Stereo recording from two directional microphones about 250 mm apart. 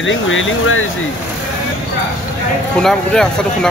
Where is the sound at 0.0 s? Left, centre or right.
Left.